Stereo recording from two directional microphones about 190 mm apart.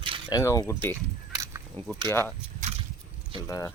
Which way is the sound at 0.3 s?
20° left (ahead or behind).